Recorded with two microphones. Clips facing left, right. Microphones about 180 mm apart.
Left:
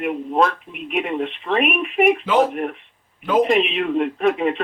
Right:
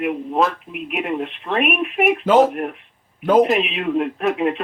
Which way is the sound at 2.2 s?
45° right (ahead or behind).